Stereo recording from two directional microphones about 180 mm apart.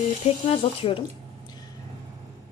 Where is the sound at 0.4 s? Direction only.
35° left (ahead or behind).